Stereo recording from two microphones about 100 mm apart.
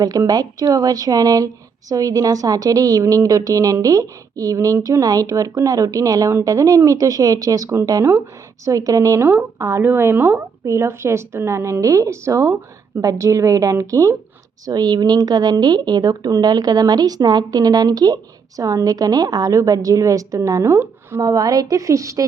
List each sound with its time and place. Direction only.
0.0 s speech: 40° right (ahead or behind)
21.2 s speech: 35° right (ahead or behind)